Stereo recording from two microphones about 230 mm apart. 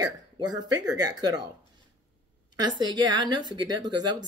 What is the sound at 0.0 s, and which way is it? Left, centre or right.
Speech, centre.